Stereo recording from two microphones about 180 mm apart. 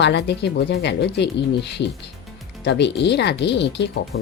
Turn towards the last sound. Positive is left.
turn(degrees=70)  # may be behind; listen again after turning